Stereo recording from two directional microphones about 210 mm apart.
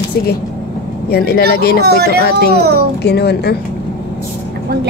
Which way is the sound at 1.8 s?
50° right (ahead or behind).